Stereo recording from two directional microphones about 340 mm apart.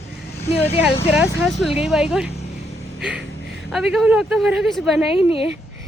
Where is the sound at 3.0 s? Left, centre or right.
Centre.